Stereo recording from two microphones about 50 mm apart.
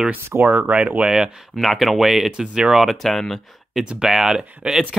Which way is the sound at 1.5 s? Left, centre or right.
Centre.